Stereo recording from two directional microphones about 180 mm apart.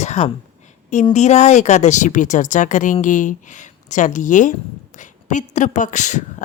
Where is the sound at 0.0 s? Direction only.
40° left (ahead or behind).